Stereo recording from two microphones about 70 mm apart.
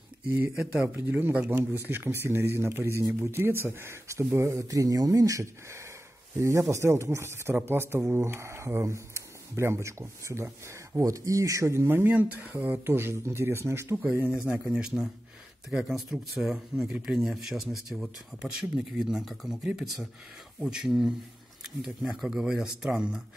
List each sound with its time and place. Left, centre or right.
0.7 s a man's voice: right
1.5 s speech: right
11.9 s speech: right
14.3 s speech: centre